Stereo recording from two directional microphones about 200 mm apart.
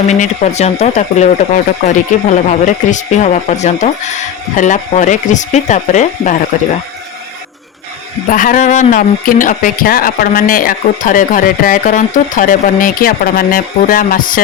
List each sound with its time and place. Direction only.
0.1 s speech: 35° left (ahead or behind)
8.3 s speech: 40° left (ahead or behind)